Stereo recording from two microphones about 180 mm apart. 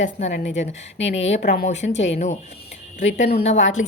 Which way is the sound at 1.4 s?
55° left (ahead or behind).